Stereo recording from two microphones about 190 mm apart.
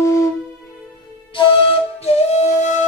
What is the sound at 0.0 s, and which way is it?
Music, 15° left (ahead or behind).